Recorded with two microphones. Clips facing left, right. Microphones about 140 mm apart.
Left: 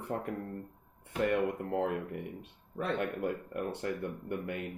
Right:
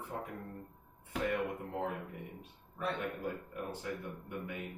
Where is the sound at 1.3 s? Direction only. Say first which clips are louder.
Left 6 dB; 65° left (ahead or behind).